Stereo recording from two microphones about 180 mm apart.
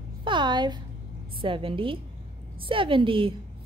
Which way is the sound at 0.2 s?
25° right (ahead or behind).